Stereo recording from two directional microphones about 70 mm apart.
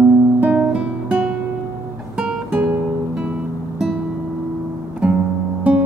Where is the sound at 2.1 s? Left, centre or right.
Centre.